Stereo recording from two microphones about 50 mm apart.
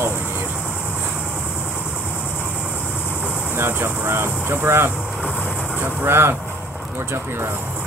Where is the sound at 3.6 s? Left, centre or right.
Right.